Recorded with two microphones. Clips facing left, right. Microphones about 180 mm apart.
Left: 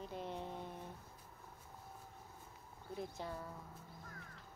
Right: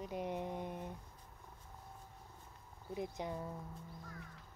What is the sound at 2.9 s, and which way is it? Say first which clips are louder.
Speech: right 3 dB; 15° right (ahead or behind).